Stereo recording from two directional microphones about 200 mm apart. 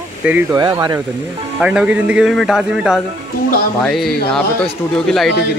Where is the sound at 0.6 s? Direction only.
20° right (ahead or behind).